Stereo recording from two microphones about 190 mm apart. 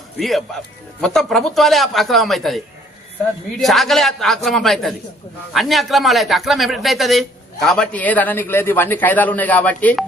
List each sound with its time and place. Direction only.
0.2 s speech: centre (ahead or behind)
3.6 s speech: centre (ahead or behind)